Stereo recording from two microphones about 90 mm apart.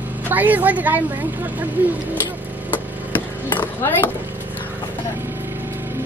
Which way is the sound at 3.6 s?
20° left (ahead or behind).